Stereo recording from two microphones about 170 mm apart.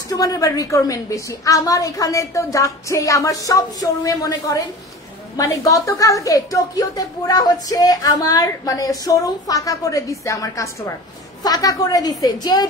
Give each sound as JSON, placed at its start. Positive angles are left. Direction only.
{"t": 0.1, "sound": "a woman's voice", "side_deg": 20}